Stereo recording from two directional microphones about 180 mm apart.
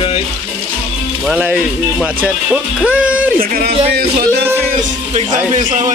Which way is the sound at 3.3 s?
55° right (ahead or behind).